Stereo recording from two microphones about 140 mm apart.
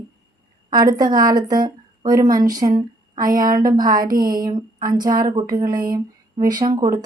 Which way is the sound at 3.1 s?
80° right.